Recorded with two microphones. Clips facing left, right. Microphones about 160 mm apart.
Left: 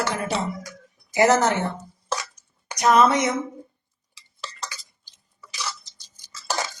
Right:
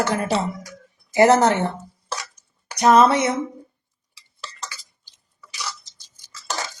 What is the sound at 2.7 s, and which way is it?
Speech, 30° right (ahead or behind).